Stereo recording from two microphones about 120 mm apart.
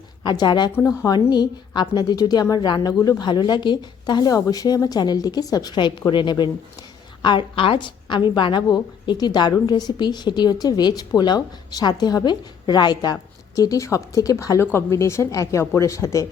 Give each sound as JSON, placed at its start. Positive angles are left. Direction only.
{"t": 0.2, "sound": "a woman's voice", "side_deg": 35}